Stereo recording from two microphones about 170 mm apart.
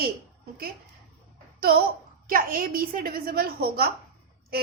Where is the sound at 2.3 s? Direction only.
55° right (ahead or behind).